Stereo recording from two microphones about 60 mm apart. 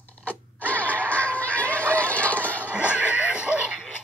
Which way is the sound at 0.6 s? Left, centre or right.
Left.